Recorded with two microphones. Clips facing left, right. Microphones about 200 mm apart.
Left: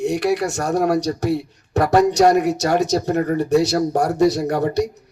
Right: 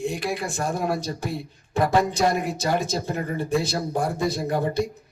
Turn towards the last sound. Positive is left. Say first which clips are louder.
# left 5 dB
turn(degrees=70)  # may be behind; listen again after turning